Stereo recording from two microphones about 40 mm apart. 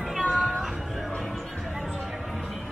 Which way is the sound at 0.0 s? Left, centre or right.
Centre.